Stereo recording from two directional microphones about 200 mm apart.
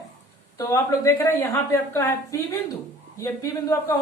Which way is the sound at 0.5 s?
15° left (ahead or behind).